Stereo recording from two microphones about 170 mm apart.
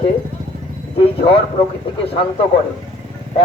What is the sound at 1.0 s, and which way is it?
Speech, 30° left (ahead or behind).